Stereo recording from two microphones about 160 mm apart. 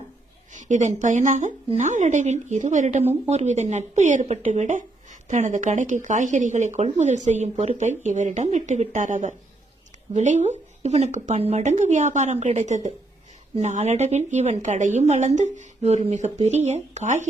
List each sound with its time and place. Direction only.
0.5 s speech: 50° right (ahead or behind)